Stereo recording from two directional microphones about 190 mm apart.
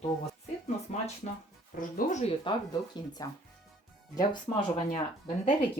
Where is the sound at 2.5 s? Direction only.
25° left (ahead or behind).